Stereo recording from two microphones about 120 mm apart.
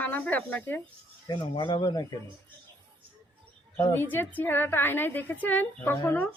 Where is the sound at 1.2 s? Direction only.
40° left (ahead or behind).